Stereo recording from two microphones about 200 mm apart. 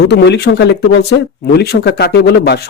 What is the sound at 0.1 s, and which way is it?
Speech, 55° left (ahead or behind).